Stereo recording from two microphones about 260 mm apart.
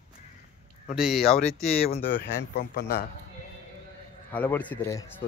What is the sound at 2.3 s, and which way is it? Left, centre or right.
Speech, left.